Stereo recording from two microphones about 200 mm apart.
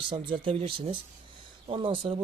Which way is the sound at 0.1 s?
25° right (ahead or behind).